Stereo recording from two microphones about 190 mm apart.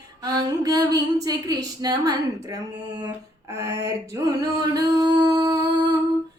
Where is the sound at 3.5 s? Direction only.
15° right (ahead or behind).